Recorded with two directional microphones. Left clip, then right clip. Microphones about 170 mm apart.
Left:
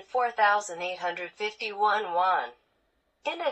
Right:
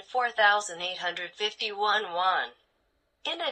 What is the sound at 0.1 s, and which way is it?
Speech, 35° right (ahead or behind).